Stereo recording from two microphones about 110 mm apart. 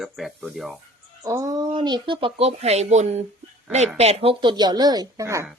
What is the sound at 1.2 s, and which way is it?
Speech, 30° right (ahead or behind).